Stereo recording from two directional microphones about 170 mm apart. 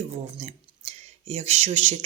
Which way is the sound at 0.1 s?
40° right (ahead or behind).